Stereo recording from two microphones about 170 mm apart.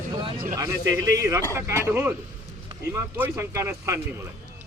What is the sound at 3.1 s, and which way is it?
Speech, 10° right (ahead or behind).